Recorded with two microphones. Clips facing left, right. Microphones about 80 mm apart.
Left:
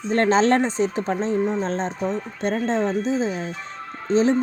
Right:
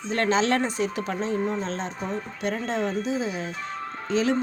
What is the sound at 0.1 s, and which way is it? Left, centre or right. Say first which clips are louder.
Speech: left 5 dB; left.